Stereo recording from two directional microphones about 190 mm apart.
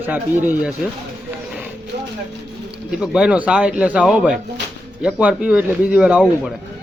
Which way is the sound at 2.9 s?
5° right (ahead or behind).